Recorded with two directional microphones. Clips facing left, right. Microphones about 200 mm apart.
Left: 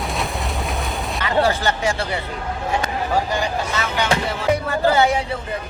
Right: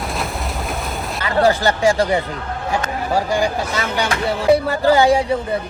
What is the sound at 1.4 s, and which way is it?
Speech, 35° right (ahead or behind).